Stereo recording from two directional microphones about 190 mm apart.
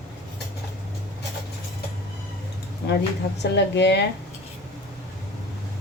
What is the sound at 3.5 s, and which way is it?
Speech, 65° left (ahead or behind).